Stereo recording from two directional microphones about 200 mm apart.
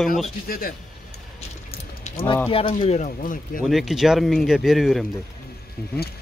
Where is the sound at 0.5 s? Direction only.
45° left (ahead or behind).